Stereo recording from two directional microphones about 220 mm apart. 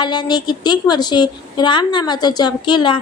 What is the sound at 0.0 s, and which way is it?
A woman's voice, 20° left (ahead or behind).